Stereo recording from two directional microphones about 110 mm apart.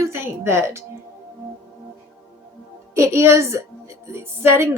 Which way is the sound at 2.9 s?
25° right (ahead or behind).